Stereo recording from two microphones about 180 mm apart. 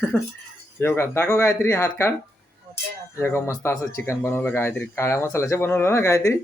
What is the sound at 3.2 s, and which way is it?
Speech, 15° left (ahead or behind).